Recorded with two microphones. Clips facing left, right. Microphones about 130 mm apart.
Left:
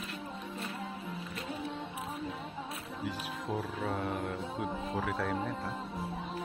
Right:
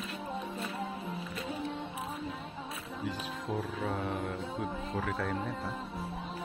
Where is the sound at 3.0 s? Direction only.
Centre (ahead or behind).